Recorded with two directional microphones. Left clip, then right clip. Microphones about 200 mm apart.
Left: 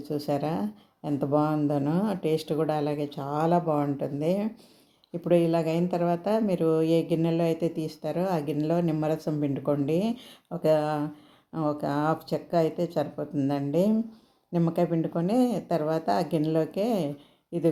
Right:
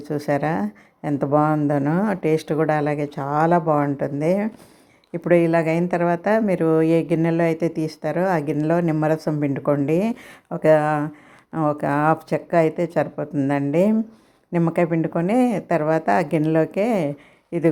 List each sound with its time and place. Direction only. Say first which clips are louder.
0.0 s speech: right 7 dB; 20° right (ahead or behind)